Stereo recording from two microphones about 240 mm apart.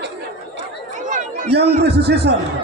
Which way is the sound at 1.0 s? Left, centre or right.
Right.